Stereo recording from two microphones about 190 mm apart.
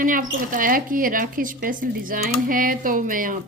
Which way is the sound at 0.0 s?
45° right (ahead or behind).